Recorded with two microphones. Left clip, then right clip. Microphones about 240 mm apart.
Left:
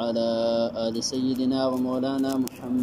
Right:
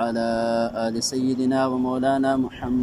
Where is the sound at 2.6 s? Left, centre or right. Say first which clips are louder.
Right 4 dB; right.